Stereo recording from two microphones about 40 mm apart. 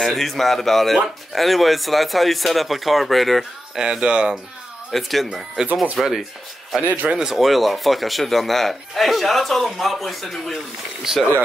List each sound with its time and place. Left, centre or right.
0.0 s speech: centre
3.7 s speech: centre
4.9 s speech: centre
5.6 s speech: centre
6.0 s speech: centre
6.8 s speech: right
7.2 s speech: centre